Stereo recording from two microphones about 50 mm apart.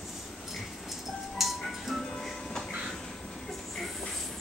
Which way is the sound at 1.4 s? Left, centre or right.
Centre.